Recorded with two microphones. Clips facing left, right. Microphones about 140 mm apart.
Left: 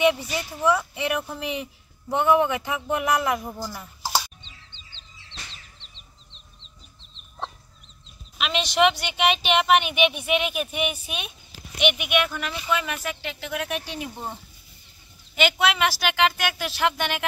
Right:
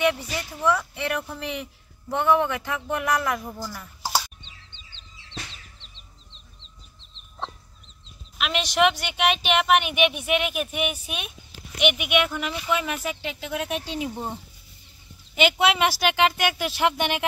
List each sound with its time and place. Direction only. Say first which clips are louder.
0.0 s speech: left 2 dB; 10° left (ahead or behind)
4.4 s chicken: even; 50° right (ahead or behind)
8.4 s speech: left 1 dB; 5° right (ahead or behind)
15.3 s speech: right 2 dB; 20° right (ahead or behind)